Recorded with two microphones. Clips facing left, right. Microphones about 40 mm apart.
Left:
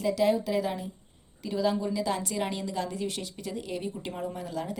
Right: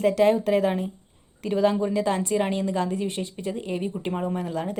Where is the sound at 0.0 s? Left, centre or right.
Right.